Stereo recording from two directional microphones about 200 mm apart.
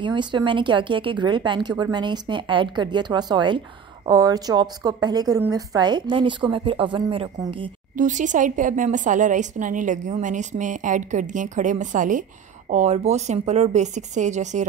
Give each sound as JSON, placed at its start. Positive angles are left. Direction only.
{"t": 0.0, "sound": "a woman's voice", "side_deg": -25}
{"t": 8.0, "sound": "a woman's voice", "side_deg": -40}